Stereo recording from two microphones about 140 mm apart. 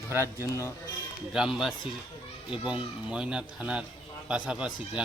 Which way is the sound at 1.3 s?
5° right (ahead or behind).